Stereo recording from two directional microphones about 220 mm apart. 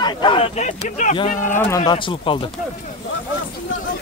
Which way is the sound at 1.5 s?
10° left (ahead or behind).